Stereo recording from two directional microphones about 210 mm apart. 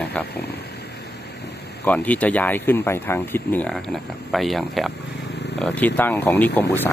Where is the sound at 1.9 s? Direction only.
5° left (ahead or behind).